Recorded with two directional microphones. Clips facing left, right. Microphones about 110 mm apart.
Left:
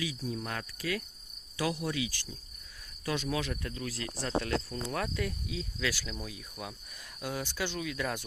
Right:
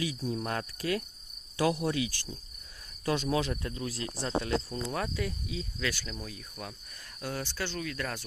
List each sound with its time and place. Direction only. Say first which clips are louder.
0.0 s cricket: right 3 dB; 45° right (ahead or behind)
3.1 s speech: right 4 dB; 35° right (ahead or behind)
4.9 s cricket: even; 5° right (ahead or behind); by 6.7 s 10° left (ahead or behind)
7.2 s speech: even; 10° left (ahead or behind)